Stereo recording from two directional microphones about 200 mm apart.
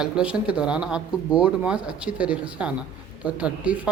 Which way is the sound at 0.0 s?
5° right (ahead or behind).